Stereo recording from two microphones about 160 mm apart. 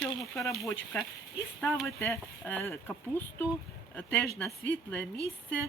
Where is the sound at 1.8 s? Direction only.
15° left (ahead or behind).